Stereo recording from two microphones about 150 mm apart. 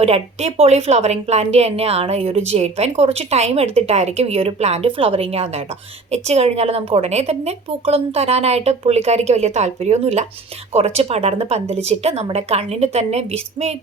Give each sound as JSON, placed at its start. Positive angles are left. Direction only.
{"t": 0.0, "sound": "a woman's voice", "side_deg": -45}